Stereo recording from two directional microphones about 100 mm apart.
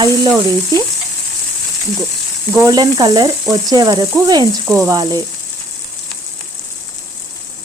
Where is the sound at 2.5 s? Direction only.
35° right (ahead or behind).